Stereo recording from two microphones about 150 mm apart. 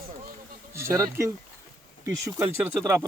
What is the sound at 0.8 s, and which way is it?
Speech, 15° right (ahead or behind).